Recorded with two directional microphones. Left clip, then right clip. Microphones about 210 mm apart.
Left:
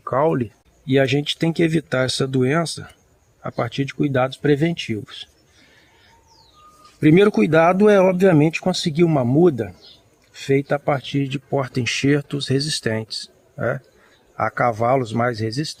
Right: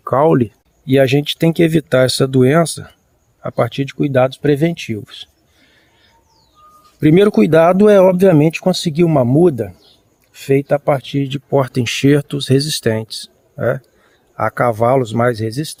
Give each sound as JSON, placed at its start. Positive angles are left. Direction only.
{"t": 0.0, "sound": "speech", "side_deg": -50}
{"t": 7.0, "sound": "speech", "side_deg": -50}